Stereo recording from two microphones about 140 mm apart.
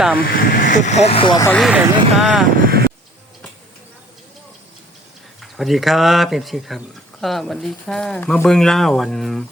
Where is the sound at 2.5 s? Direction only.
90° right.